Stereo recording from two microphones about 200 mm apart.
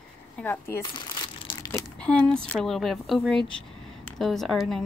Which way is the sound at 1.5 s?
15° left (ahead or behind).